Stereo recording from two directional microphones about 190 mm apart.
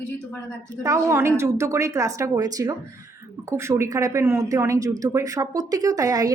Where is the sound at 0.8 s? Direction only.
15° right (ahead or behind).